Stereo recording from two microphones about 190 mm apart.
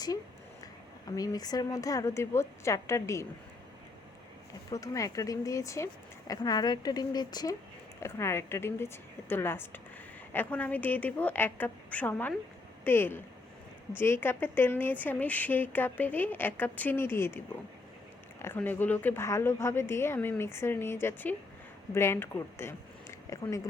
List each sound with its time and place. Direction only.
1.0 s speech: 20° left (ahead or behind)
4.7 s speech: 15° left (ahead or behind)
18.4 s speech: 10° left (ahead or behind)